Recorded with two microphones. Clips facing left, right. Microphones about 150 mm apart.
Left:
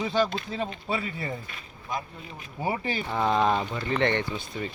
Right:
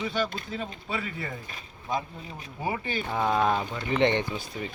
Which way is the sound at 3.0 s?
5° right (ahead or behind).